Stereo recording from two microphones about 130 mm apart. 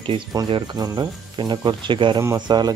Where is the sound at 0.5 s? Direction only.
30° right (ahead or behind).